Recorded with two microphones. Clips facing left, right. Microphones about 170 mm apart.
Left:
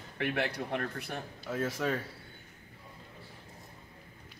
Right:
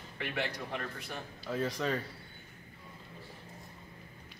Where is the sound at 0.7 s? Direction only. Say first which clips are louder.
Left 4 dB; 55° left (ahead or behind).